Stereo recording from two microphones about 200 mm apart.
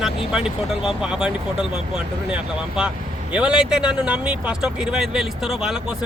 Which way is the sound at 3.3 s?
5° right (ahead or behind).